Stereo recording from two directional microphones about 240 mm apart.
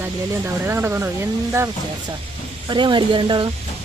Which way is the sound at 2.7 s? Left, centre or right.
Centre.